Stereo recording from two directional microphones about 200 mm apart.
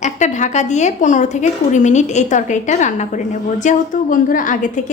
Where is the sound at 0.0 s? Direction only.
35° left (ahead or behind).